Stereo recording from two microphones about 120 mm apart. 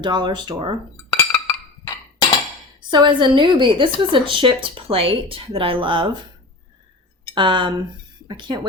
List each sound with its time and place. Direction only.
0.0 s speech: 40° right (ahead or behind)
1.1 s wood block: 20° left (ahead or behind)
2.9 s a woman's voice: 40° right (ahead or behind)
7.3 s a woman's voice: 40° right (ahead or behind)